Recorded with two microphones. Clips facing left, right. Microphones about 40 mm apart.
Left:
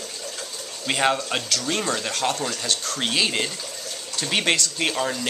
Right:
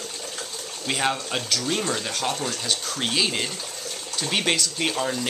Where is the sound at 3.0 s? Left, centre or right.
Centre.